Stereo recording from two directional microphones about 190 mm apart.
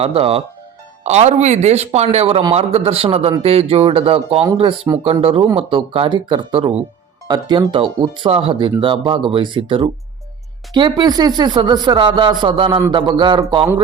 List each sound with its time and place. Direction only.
0.0 s a man's voice: 30° right (ahead or behind)